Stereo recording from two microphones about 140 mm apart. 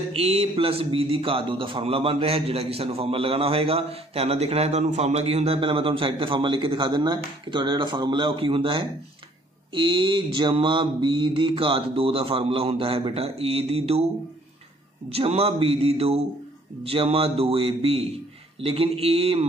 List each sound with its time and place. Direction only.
0.1 s speech: 45° right (ahead or behind)
4.8 s mantra: 55° right (ahead or behind)
15.0 s speech: 45° right (ahead or behind)